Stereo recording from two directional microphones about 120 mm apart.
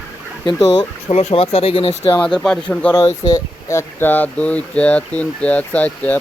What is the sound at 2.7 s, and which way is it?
Speech, 10° left (ahead or behind).